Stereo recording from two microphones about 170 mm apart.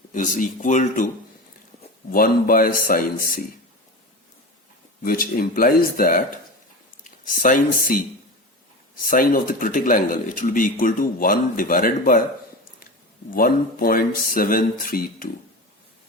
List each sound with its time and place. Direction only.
0.1 s speech: 50° left (ahead or behind)
2.0 s speech: 55° left (ahead or behind)
5.0 s speech: 55° left (ahead or behind)
13.3 s speech: 60° left (ahead or behind)